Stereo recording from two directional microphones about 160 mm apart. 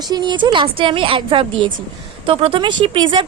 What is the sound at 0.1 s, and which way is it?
Speech, 25° right (ahead or behind).